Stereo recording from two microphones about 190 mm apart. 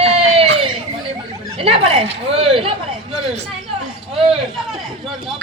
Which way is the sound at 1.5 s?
30° right (ahead or behind).